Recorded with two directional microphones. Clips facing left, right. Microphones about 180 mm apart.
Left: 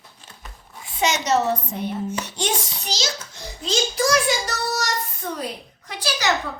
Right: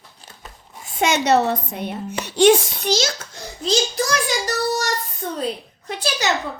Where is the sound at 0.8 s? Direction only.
50° right (ahead or behind).